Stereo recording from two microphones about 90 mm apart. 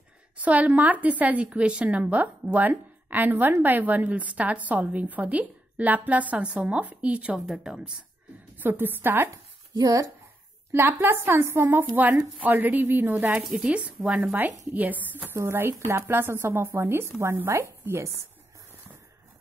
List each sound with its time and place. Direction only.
0.4 s a woman's voice: 15° right (ahead or behind)
8.5 s speech: 20° right (ahead or behind)
9.3 s a sound: 40° right (ahead or behind)
10.7 s speech: 25° right (ahead or behind)
13.5 s a woman's voice: 10° right (ahead or behind); by 18.1 s 30° right (ahead or behind)